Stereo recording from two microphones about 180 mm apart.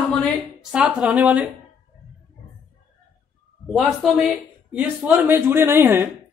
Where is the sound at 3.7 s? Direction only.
Centre (ahead or behind).